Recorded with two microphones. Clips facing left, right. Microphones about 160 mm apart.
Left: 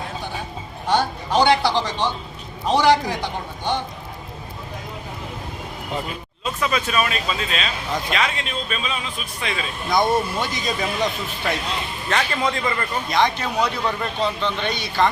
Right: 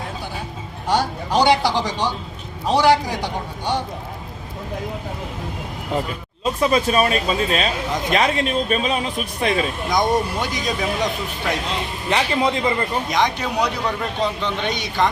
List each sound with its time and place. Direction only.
0.9 s speech: 10° right (ahead or behind)
6.4 s speech: 35° right (ahead or behind)
9.9 s speech: 15° right (ahead or behind)